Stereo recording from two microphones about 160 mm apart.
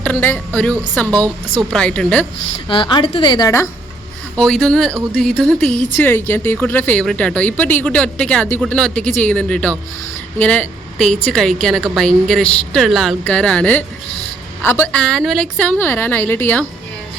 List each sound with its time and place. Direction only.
0.0 s a woman's voice: 10° left (ahead or behind)
2.6 s a woman's voice: 30° left (ahead or behind)
4.4 s a woman's voice: 5° left (ahead or behind)